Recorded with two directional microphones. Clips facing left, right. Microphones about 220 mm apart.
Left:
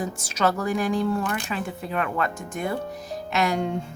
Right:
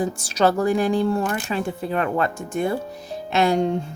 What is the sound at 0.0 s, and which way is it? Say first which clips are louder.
Speech: right 5 dB; 30° right (ahead or behind).